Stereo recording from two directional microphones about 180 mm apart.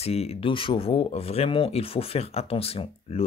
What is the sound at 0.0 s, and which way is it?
Speech, 35° left (ahead or behind).